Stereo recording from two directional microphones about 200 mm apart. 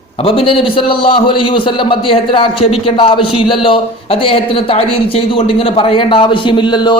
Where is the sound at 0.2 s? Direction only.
25° left (ahead or behind).